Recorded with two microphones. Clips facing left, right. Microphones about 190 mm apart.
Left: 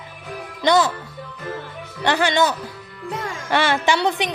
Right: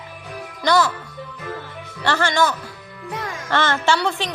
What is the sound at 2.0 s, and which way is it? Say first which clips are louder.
A woman's voice: left 1 dB; 15° left (ahead or behind).